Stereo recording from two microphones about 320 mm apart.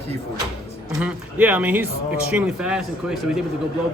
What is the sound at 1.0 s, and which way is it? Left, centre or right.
Speech, centre.